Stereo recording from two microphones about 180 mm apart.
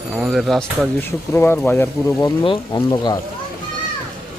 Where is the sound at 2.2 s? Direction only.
25° left (ahead or behind).